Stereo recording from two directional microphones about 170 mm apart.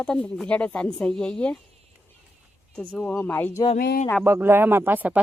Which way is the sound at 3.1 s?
15° left (ahead or behind).